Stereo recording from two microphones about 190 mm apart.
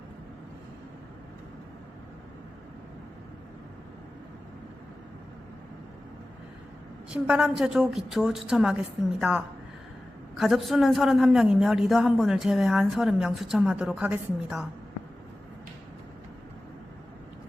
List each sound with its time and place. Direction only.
7.1 s a woman's voice: 5° right (ahead or behind)
10.3 s a woman's voice: centre (ahead or behind)